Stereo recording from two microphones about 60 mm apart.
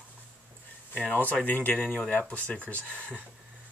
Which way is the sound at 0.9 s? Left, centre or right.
Left.